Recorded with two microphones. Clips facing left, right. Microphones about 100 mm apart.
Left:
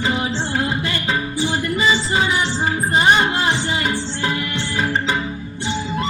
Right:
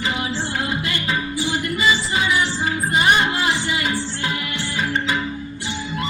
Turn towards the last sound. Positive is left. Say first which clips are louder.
# left 2 dB
turn(degrees=25)  # may be behind; listen again after turning